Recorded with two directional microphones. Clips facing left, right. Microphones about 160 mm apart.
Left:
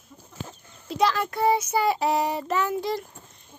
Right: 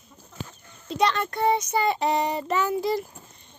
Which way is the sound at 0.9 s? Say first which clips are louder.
Even; 5° left (ahead or behind).